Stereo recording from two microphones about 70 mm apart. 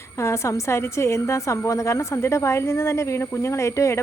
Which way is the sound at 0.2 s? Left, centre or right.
Left.